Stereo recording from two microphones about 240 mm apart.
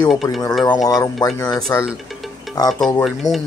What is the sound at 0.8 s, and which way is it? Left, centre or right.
Speech, centre.